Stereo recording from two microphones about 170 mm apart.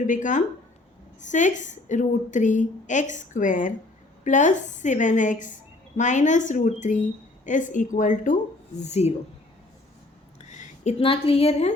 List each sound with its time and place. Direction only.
0.0 s a woman's voice: 50° left (ahead or behind)
10.5 s a woman's voice: 35° left (ahead or behind)